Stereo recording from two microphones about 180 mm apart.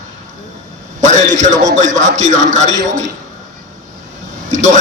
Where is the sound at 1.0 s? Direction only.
40° right (ahead or behind).